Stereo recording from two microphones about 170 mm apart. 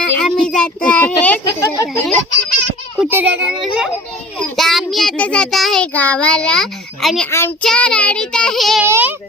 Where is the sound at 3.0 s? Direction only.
5° right (ahead or behind).